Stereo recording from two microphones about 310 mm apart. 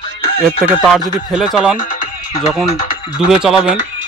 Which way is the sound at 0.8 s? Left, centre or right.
Centre.